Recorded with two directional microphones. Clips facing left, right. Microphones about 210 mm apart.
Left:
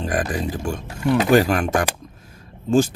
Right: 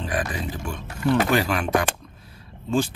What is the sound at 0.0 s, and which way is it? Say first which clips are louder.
Speech: left 4 dB; 45° left (ahead or behind).